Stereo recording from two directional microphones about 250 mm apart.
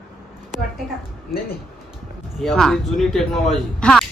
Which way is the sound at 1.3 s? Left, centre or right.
Centre.